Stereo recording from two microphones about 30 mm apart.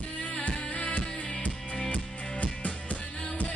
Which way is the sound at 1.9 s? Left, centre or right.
Left.